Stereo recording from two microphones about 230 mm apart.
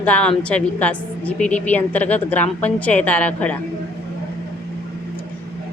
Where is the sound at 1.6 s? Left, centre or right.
Centre.